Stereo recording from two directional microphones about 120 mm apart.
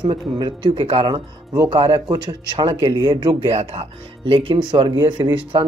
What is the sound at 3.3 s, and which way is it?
Speech, 55° right (ahead or behind).